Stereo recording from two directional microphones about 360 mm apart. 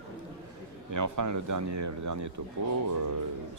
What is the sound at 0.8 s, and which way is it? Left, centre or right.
Speech, right.